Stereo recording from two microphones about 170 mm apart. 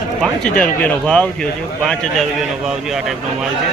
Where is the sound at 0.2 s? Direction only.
5° left (ahead or behind).